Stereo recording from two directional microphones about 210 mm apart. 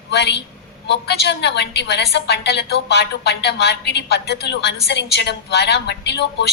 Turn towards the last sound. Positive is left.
turn(degrees=55)  # may be behind; listen again after turning